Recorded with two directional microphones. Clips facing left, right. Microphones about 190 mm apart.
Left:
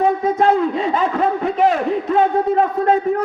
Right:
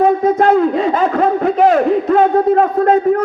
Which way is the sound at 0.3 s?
40° right (ahead or behind).